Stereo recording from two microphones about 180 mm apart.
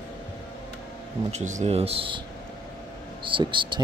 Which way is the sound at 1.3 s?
40° right (ahead or behind).